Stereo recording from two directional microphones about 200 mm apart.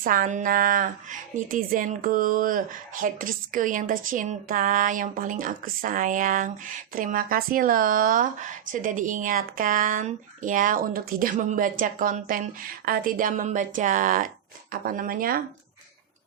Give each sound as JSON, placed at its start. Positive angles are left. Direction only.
{"t": 0.0, "sound": "a woman's voice", "side_deg": -45}